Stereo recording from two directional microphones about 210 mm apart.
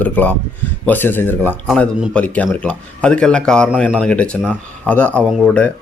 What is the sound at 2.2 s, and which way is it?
A man's voice, 5° left (ahead or behind).